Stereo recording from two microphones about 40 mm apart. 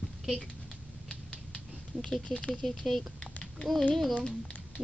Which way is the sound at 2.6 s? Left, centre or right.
Centre.